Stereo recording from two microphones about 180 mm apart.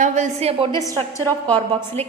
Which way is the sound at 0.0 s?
40° right (ahead or behind).